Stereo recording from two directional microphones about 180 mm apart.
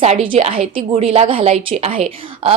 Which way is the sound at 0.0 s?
35° right (ahead or behind).